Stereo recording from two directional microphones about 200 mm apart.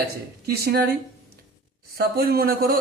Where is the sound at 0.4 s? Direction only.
50° right (ahead or behind).